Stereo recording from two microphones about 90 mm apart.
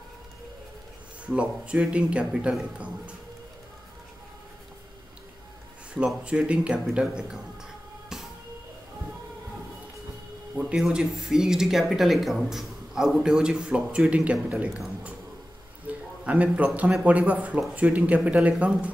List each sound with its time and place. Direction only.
1.2 s speech: 15° right (ahead or behind)
5.9 s speech: 10° right (ahead or behind)
8.1 s music: 5° right (ahead or behind)
10.8 s a man's voice: 5° right (ahead or behind)